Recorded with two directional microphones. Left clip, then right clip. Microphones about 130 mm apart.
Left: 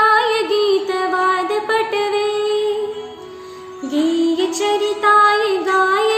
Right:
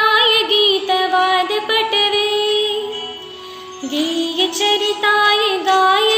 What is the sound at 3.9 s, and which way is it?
Music, 25° left (ahead or behind).